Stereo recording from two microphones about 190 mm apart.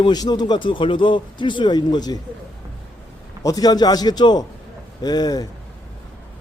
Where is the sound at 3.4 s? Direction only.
20° left (ahead or behind).